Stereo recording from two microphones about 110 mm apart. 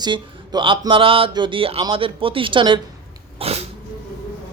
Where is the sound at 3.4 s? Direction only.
70° right (ahead or behind).